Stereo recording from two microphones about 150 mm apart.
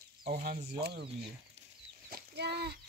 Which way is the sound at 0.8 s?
90° right.